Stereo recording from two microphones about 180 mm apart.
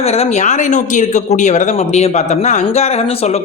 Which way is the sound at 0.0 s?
35° left (ahead or behind).